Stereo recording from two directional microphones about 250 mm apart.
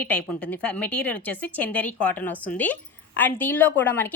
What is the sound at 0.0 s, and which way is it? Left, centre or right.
A woman's voice, centre.